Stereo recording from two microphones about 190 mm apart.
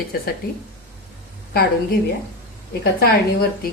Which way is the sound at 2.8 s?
55° left (ahead or behind).